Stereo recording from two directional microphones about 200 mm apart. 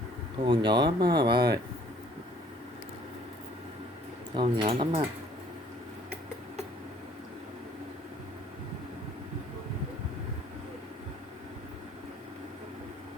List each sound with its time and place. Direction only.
0.4 s speech: 25° right (ahead or behind)
1.3 s speech: 55° right (ahead or behind)
4.4 s speech: 25° right (ahead or behind)